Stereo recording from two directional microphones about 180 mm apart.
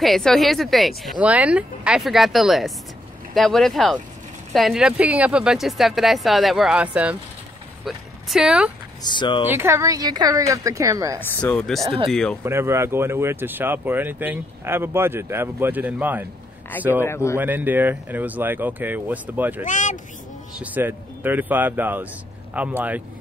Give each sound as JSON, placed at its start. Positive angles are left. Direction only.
{"t": 0.0, "sound": "speech", "side_deg": 0}
{"t": 9.0, "sound": "speech", "side_deg": 25}
{"t": 9.5, "sound": "speech", "side_deg": -15}
{"t": 11.1, "sound": "speech", "side_deg": 10}
{"t": 12.4, "sound": "speech", "side_deg": -15}
{"t": 17.0, "sound": "speech", "side_deg": 15}
{"t": 17.4, "sound": "speech", "side_deg": -10}
{"t": 19.6, "sound": "speech", "side_deg": 45}
{"t": 20.5, "sound": "speech", "side_deg": -10}